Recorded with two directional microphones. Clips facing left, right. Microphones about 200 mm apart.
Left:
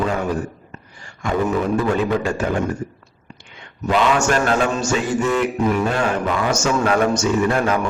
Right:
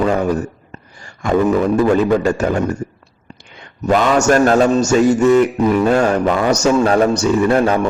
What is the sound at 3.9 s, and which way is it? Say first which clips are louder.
A man's voice: right 4 dB; 45° right (ahead or behind).